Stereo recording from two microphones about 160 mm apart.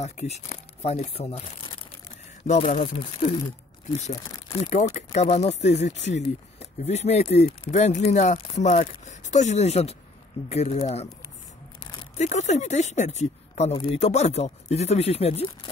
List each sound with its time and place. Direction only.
0.0 s speech: 45° left (ahead or behind)
2.4 s speech: 50° left (ahead or behind)
4.9 s speech: 45° left (ahead or behind)
12.2 s speech: 45° left (ahead or behind)